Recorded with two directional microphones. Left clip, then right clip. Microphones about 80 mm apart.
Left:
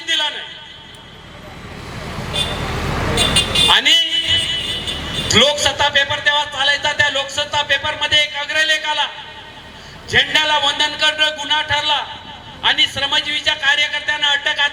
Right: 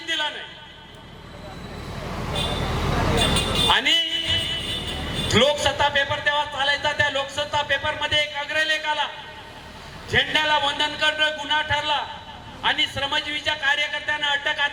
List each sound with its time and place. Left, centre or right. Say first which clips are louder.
0.0 s a sound: left 7 dB; centre
3.2 s music: left 9 dB; left
10.1 s a man's voice: left 6 dB; centre